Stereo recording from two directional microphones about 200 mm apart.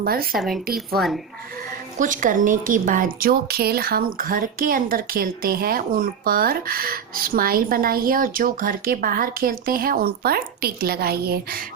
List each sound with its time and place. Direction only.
0.0 s a woman's voice: 50° right (ahead or behind)
0.3 s speech: centre (ahead or behind)
2.0 s a woman's voice: 40° right (ahead or behind)